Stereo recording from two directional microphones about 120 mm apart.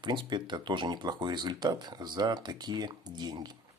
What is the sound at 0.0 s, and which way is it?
Speech, 40° right (ahead or behind).